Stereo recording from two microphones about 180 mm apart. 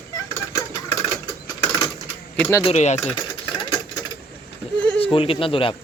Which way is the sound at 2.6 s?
40° left (ahead or behind).